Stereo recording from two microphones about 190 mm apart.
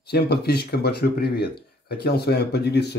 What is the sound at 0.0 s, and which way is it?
Speech, 60° left (ahead or behind).